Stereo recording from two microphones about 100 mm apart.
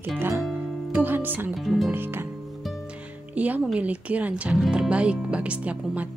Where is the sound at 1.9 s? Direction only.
20° right (ahead or behind).